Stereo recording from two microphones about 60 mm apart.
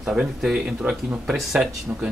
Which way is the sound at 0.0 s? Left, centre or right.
Centre.